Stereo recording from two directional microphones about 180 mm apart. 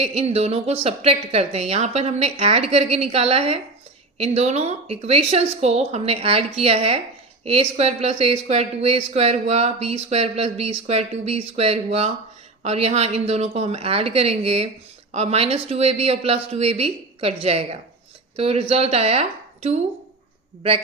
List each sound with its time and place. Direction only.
0.0 s speech: 35° right (ahead or behind)